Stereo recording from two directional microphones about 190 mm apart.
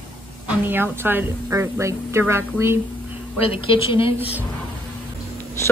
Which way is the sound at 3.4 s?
30° left (ahead or behind).